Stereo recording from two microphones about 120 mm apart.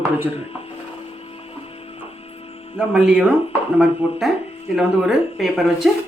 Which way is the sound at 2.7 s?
10° right (ahead or behind).